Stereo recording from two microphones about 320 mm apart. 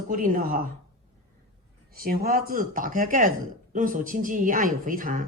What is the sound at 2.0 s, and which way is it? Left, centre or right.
Speech, right.